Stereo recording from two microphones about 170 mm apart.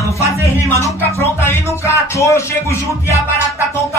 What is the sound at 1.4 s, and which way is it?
Music, 15° left (ahead or behind).